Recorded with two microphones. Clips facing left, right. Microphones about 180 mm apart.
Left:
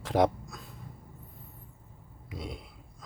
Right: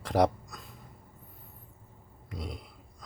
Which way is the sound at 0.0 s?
Centre (ahead or behind).